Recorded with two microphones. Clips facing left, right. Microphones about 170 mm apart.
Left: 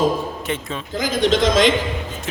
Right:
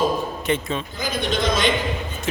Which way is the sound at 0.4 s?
Centre (ahead or behind).